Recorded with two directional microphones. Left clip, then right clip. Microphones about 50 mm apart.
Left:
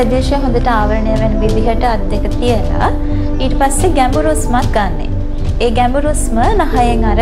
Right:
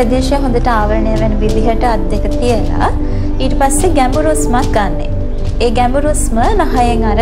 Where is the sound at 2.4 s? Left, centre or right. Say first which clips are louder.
Even; centre.